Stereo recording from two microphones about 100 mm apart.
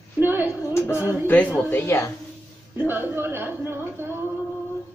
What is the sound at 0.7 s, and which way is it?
Speech, 25° left (ahead or behind).